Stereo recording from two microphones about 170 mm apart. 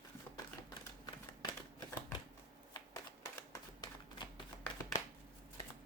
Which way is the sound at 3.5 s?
20° left (ahead or behind).